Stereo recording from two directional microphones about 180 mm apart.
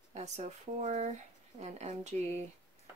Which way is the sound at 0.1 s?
40° right (ahead or behind).